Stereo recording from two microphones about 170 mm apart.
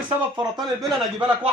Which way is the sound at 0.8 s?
Centre (ahead or behind).